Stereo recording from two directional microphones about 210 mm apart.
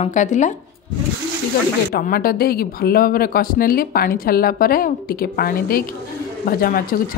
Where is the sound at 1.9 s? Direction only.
45° left (ahead or behind).